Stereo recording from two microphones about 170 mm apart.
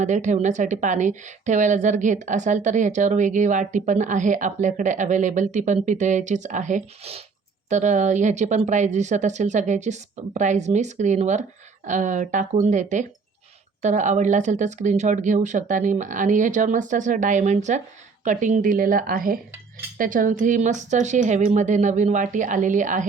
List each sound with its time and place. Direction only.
0.0 s a woman's voice: 45° right (ahead or behind)